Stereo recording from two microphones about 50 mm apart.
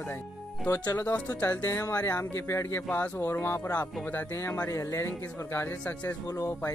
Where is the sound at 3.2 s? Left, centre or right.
Left.